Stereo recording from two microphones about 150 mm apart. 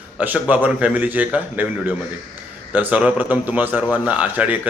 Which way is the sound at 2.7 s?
10° right (ahead or behind).